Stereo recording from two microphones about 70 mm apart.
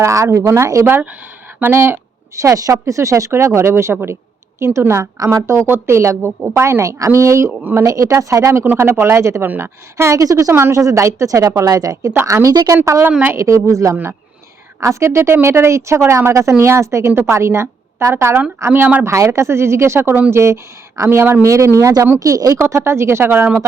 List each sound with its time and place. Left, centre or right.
0.0 s speech: right
8.6 s speech: right
10.2 s a woman's voice: right
10.5 s a woman's voice: right
12.2 s speech: right
13.9 s speech: right
14.8 s a woman's voice: right
22.6 s speech: right